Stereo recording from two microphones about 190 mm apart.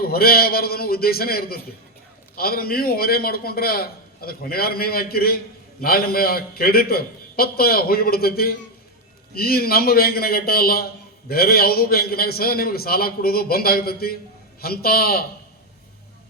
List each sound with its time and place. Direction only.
0.0 s a man's voice: 55° left (ahead or behind)